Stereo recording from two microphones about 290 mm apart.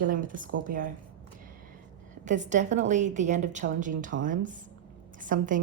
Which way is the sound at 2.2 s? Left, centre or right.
Right.